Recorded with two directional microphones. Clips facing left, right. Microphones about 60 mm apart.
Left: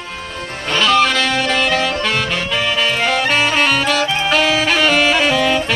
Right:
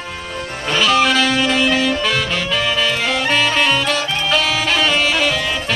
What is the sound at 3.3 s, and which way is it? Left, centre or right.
Saxophone, centre.